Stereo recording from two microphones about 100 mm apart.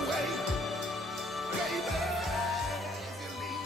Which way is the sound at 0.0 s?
Centre (ahead or behind).